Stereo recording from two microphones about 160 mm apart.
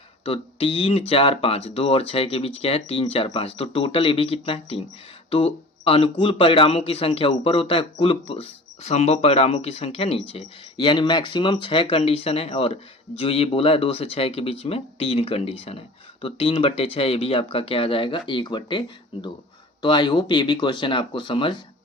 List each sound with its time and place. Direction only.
0.3 s speech: 35° left (ahead or behind)
19.8 s speech: 25° left (ahead or behind)